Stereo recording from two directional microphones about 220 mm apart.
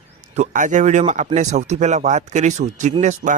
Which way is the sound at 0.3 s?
35° right (ahead or behind).